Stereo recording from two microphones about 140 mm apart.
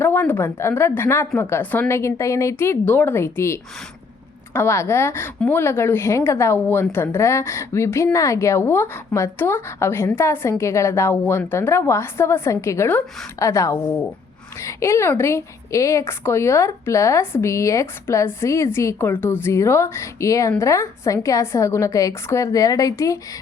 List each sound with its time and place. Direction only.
0.0 s a woman's voice: 15° left (ahead or behind)